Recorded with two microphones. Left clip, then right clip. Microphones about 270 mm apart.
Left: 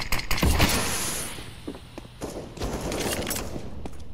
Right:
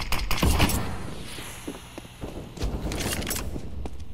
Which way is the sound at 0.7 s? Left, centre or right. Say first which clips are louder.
Left 7 dB; left.